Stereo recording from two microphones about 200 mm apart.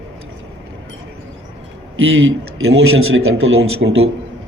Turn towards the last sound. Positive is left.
turn(degrees=-85)